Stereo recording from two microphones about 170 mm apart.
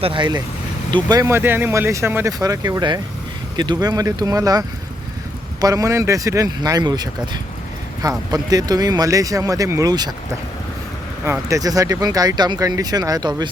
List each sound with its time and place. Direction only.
0.0 s speech: 30° right (ahead or behind)
8.3 s speech: 20° right (ahead or behind)
11.3 s speech: 20° right (ahead or behind)